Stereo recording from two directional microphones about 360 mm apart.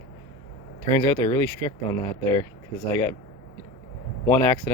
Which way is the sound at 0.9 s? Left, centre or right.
Centre.